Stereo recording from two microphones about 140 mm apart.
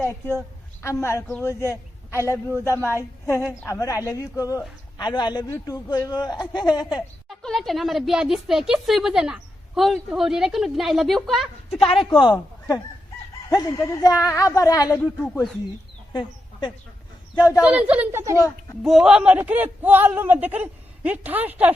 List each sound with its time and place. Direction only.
0.0 s a woman's voice: 20° left (ahead or behind)
3.7 s a woman's voice: 25° left (ahead or behind)
6.9 s a woman's voice: centre (ahead or behind)
11.8 s a man's voice: 40° left (ahead or behind)
15.0 s a woman's voice: 10° left (ahead or behind)
16.1 s a woman's voice: 35° left (ahead or behind)
17.6 s speech: 10° right (ahead or behind)
18.8 s speech: centre (ahead or behind)